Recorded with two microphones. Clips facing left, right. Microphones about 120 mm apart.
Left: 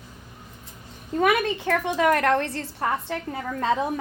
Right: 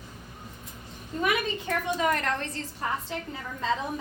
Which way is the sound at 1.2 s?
65° left (ahead or behind).